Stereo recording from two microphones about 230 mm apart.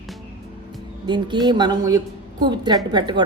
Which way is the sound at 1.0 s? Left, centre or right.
Centre.